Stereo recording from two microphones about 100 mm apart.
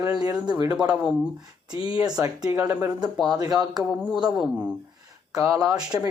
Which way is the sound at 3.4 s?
40° right (ahead or behind).